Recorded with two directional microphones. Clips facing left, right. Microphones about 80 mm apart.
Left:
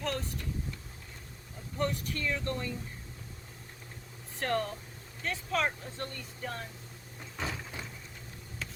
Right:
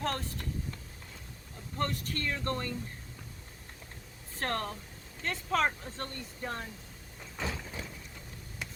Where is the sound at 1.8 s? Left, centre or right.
Right.